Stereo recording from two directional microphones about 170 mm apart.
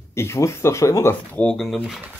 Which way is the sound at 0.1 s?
15° left (ahead or behind).